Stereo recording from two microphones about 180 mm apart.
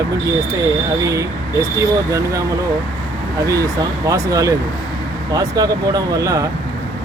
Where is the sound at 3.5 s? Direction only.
20° right (ahead or behind).